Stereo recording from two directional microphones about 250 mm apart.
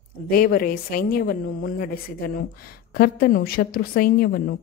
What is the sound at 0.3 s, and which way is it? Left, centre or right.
Speech, left.